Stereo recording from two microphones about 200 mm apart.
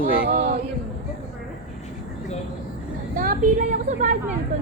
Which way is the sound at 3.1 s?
45° right (ahead or behind).